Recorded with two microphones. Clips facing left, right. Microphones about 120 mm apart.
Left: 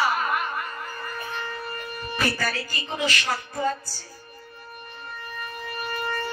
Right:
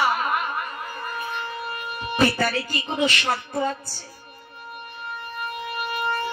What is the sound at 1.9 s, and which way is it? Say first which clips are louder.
Speech: right 6 dB; 25° right (ahead or behind).